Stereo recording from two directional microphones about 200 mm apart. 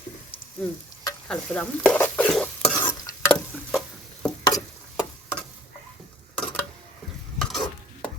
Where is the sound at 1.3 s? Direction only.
5° left (ahead or behind).